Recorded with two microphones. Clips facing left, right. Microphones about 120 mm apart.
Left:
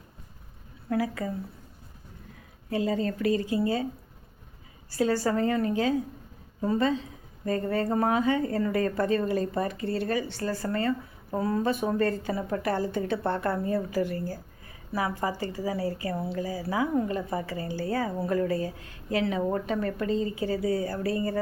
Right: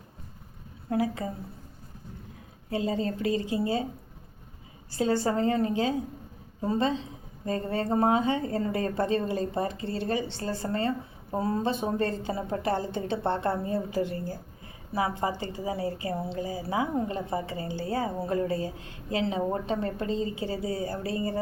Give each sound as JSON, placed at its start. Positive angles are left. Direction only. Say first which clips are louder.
{"t": 0.9, "sound": "a woman's voice", "louder": "even", "side_deg": -25}
{"t": 2.6, "sound": "a woman's voice", "louder": "left 1 dB", "side_deg": -25}
{"t": 4.9, "sound": "a woman's voice", "louder": "left 1 dB", "side_deg": -25}